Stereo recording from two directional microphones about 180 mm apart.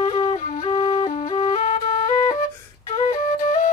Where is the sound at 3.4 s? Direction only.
40° left (ahead or behind).